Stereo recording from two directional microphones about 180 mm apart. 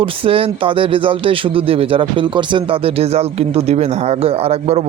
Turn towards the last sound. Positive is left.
turn(degrees=-35)  # may be behind; listen again after turning